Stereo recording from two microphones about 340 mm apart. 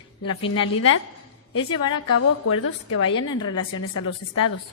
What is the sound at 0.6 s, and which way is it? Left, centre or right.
A woman's voice, left.